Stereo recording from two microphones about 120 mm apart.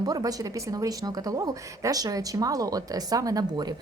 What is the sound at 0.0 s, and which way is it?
A woman's voice, 30° right (ahead or behind).